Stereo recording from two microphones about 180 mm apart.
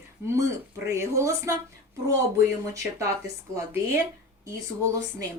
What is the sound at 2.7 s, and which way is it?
Speech, 15° right (ahead or behind).